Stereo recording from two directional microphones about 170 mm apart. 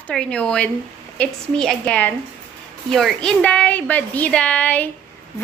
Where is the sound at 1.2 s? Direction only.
5° left (ahead or behind).